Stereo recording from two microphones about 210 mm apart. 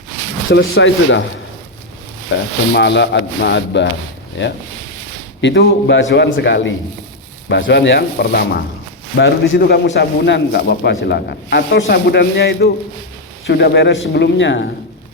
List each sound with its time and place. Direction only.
0.5 s a man's voice: 60° left (ahead or behind)
2.3 s a man's voice: 55° left (ahead or behind)
5.4 s a man's voice: 55° left (ahead or behind)